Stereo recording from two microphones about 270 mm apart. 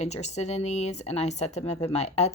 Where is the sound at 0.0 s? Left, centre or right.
Left.